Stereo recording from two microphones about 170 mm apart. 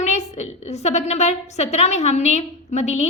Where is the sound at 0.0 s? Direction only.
40° left (ahead or behind).